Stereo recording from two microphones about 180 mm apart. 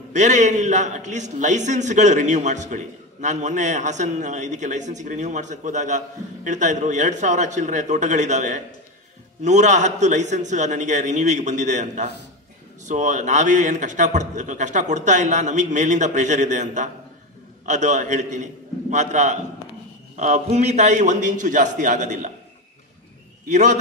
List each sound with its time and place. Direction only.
0.1 s a man's voice: 40° right (ahead or behind)
23.5 s a man's voice: 40° right (ahead or behind)